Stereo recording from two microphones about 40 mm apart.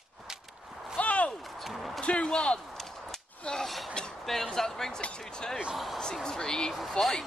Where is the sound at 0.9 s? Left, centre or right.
Left.